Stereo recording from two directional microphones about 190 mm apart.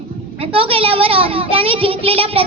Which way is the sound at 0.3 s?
30° right (ahead or behind).